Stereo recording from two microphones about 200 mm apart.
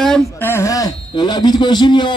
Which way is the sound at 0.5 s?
15° left (ahead or behind).